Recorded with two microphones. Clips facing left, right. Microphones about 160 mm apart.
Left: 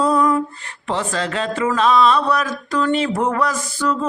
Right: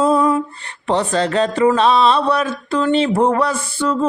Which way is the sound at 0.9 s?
35° right (ahead or behind).